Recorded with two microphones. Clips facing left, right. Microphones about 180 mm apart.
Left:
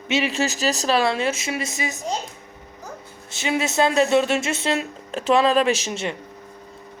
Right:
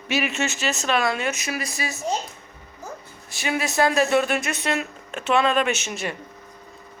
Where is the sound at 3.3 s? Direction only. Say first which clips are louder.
Left 2 dB; 20° left (ahead or behind).